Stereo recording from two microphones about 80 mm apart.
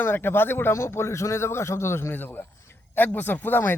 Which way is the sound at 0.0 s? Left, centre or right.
Left.